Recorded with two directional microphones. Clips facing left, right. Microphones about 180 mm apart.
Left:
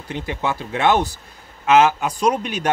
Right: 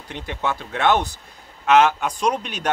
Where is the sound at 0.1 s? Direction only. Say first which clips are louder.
Left 2 dB; 10° left (ahead or behind).